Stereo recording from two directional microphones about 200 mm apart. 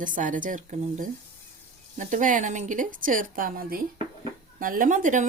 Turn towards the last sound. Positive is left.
turn(degrees=-40)  # may be behind; listen again after turning